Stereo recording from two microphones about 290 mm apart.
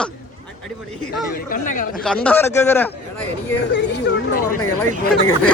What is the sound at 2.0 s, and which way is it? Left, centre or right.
Speech, centre.